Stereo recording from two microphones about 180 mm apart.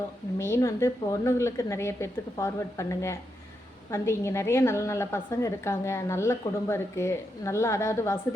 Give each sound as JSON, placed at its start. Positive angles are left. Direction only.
{"t": 0.3, "sound": "a woman's voice", "side_deg": 15}